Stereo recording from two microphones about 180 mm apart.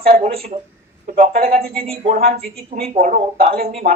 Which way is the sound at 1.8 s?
35° right (ahead or behind).